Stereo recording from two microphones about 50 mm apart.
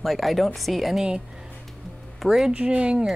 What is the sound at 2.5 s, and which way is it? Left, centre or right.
Speech, right.